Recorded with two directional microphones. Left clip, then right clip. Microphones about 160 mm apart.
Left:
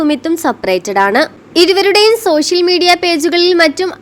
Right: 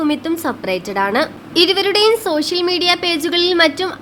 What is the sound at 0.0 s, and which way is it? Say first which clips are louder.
A woman's voice: left 5 dB; 40° left (ahead or behind).